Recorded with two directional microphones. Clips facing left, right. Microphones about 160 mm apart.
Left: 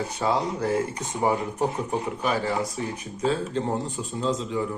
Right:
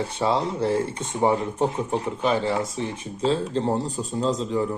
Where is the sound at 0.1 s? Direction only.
25° right (ahead or behind).